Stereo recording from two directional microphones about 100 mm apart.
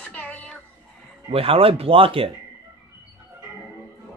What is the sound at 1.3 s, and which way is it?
Speech, 70° right (ahead or behind).